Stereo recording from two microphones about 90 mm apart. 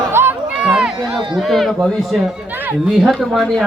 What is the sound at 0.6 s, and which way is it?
Speech, 10° right (ahead or behind).